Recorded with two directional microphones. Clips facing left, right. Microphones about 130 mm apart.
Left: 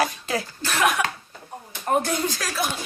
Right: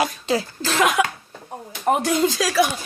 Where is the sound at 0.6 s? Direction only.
90° right.